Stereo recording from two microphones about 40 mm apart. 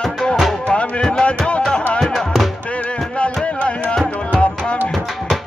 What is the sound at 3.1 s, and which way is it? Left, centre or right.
Music, left.